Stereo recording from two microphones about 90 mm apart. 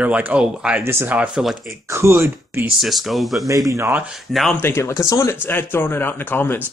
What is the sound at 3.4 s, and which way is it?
Speech, 40° right (ahead or behind).